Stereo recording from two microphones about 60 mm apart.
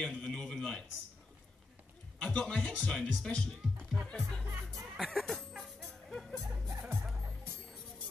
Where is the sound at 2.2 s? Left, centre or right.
Centre.